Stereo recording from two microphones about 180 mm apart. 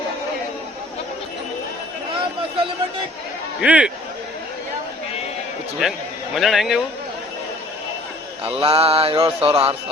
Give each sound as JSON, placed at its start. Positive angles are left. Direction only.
{"t": 3.6, "sound": "a man's voice", "side_deg": -5}
{"t": 5.8, "sound": "a man's voice", "side_deg": 0}
{"t": 8.4, "sound": "mantra", "side_deg": -30}